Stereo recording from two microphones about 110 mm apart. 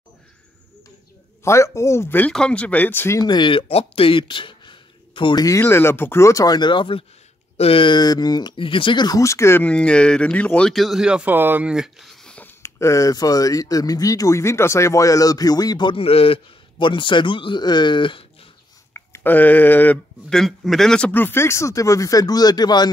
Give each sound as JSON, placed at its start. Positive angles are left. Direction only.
{"t": 1.4, "sound": "speech", "side_deg": 25}
{"t": 3.2, "sound": "speech", "side_deg": 40}
{"t": 3.6, "sound": "speech", "side_deg": 65}
{"t": 5.6, "sound": "speech", "side_deg": 20}
{"t": 9.7, "sound": "speech", "side_deg": 10}
{"t": 11.7, "sound": "a sound", "side_deg": 0}
{"t": 12.6, "sound": "speech", "side_deg": 25}
{"t": 18.9, "sound": "speech", "side_deg": 20}
{"t": 20.3, "sound": "speech", "side_deg": 0}
{"t": 21.1, "sound": "speech", "side_deg": 20}